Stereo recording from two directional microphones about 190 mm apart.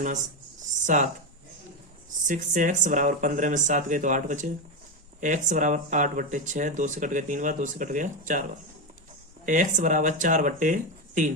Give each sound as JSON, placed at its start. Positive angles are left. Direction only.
{"t": 0.7, "sound": "a sound", "side_deg": -40}
{"t": 2.2, "sound": "speech", "side_deg": -40}
{"t": 9.5, "sound": "speech", "side_deg": -40}